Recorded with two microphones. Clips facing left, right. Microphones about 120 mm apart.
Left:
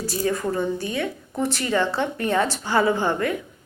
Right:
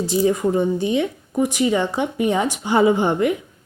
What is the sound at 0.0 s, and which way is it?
A woman's voice, 20° right (ahead or behind).